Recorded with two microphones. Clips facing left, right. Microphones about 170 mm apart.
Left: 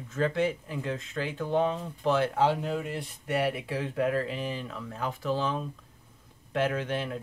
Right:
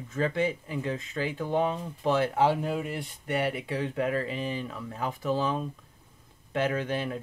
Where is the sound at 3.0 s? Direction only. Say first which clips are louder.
Even; centre (ahead or behind).